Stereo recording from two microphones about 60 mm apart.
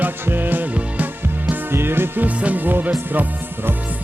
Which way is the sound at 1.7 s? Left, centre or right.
Right.